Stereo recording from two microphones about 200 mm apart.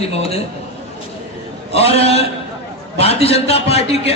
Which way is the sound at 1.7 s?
30° left (ahead or behind).